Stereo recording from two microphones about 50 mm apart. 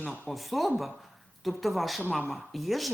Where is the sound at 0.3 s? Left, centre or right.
Centre.